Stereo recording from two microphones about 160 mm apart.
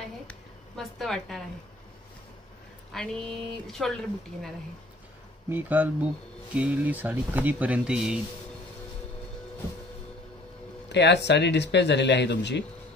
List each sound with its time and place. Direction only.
0.3 s a woman's voice: 5° left (ahead or behind)
2.9 s speech: 5° left (ahead or behind)
5.5 s speech: 10° right (ahead or behind)
10.9 s speech: 90° left